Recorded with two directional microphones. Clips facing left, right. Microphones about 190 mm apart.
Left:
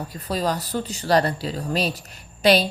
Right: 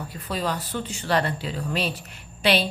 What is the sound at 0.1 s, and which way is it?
Speech, 40° left (ahead or behind).